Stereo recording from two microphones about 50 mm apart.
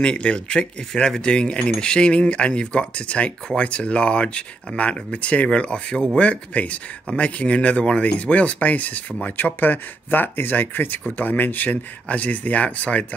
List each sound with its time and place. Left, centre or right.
0.0 s speech: left